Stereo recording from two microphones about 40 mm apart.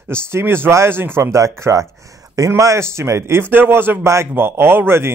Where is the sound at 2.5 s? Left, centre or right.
Right.